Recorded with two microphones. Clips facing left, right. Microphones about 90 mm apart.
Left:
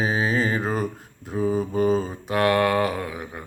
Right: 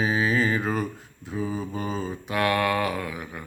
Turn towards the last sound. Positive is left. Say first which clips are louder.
# left 3 dB
turn(degrees=35)  # may be behind; listen again after turning